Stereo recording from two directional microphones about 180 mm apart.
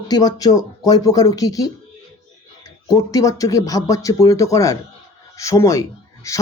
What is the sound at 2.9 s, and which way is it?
Speech, 20° left (ahead or behind).